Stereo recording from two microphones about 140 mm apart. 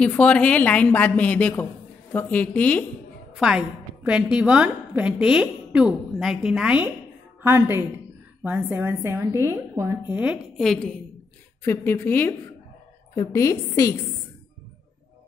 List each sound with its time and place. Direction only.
0.0 s a woman's voice: 10° left (ahead or behind)
3.3 s a woman's voice: 5° right (ahead or behind)
7.4 s a woman's voice: 15° right (ahead or behind)
10.6 s a woman's voice: 5° left (ahead or behind)
11.6 s a woman's voice: 15° left (ahead or behind)